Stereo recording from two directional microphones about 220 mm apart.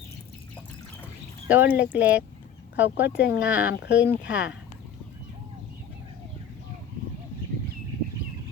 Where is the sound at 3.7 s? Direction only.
50° left (ahead or behind).